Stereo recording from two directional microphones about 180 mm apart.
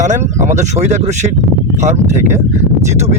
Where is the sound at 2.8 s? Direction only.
40° right (ahead or behind).